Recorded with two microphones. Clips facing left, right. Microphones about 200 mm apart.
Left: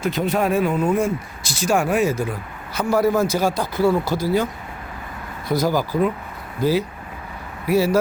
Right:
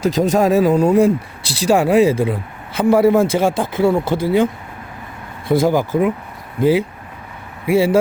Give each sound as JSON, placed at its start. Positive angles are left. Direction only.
{"t": 0.0, "sound": "speech", "side_deg": -40}
{"t": 5.5, "sound": "speech", "side_deg": -25}
{"t": 7.7, "sound": "speech", "side_deg": -25}